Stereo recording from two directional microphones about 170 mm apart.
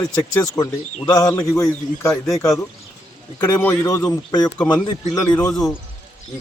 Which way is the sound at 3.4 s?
20° left (ahead or behind).